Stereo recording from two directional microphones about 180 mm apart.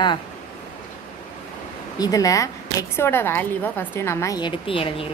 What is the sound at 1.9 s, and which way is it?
Speech, 20° left (ahead or behind).